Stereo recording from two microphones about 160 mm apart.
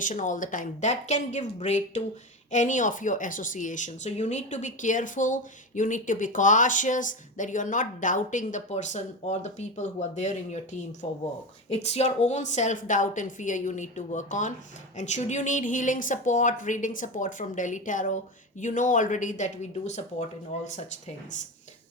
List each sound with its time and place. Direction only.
0.0 s speech: 50° left (ahead or behind)